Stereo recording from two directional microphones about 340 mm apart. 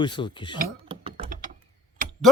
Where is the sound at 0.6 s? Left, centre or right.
Centre.